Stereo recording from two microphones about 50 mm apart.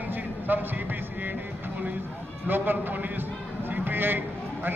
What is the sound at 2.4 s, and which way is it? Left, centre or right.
Speech, right.